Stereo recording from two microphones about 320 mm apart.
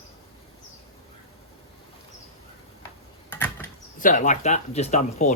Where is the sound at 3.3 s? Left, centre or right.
Centre.